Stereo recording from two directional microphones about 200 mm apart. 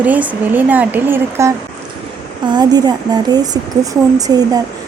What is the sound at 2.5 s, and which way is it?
Speech, 20° right (ahead or behind).